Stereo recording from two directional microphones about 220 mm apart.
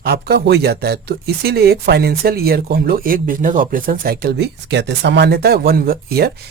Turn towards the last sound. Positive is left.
turn(degrees=-45)  # may be behind; listen again after turning